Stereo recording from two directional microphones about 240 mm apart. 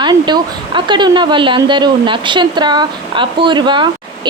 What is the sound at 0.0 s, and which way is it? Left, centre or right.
Speech, centre.